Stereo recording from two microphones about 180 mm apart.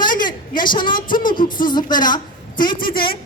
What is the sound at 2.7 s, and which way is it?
Speech, 55° left (ahead or behind).